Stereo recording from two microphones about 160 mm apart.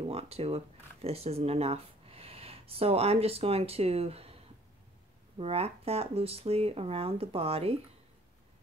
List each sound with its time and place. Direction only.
0.0 s speech: 40° right (ahead or behind)
5.4 s speech: 40° right (ahead or behind)